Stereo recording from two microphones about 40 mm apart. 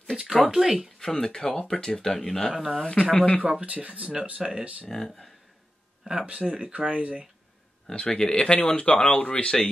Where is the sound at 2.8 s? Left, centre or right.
Left.